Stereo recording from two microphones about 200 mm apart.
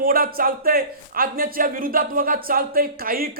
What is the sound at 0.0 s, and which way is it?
A man's voice, 45° right (ahead or behind).